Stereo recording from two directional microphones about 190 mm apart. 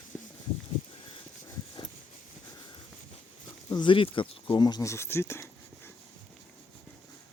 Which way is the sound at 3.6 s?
25° left (ahead or behind).